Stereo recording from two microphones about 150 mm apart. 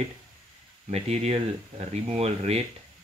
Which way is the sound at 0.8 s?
45° right (ahead or behind).